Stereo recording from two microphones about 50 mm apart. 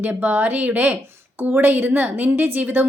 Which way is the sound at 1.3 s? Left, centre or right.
Right.